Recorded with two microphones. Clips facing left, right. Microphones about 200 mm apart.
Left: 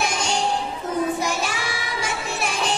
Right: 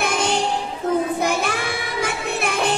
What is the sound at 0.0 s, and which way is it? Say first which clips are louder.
Child singing: right 3 dB; 60° right (ahead or behind).